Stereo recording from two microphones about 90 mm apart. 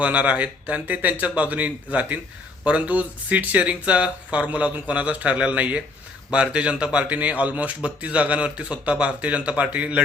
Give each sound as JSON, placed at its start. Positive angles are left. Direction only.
{"t": 0.0, "sound": "speech", "side_deg": -15}